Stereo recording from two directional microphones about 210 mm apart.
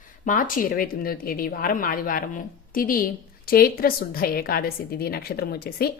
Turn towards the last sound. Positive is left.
turn(degrees=50)  # may be behind; listen again after turning